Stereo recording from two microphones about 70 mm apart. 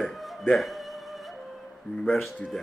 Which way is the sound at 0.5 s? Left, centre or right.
Centre.